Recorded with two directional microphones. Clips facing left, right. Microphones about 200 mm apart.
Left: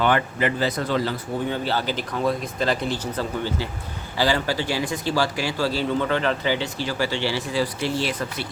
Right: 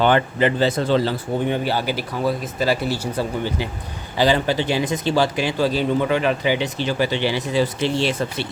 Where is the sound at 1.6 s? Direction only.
10° right (ahead or behind).